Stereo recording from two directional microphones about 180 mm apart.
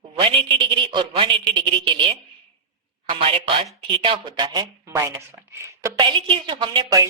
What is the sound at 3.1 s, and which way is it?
A woman's voice, 30° right (ahead or behind).